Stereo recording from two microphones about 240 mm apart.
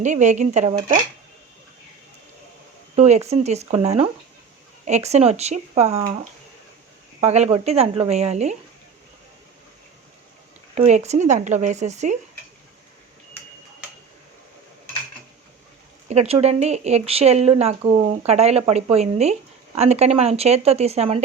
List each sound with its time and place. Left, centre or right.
0.0 s speech: right
2.9 s speech: right
7.2 s speech: right
10.8 s speech: right
16.0 s speech: right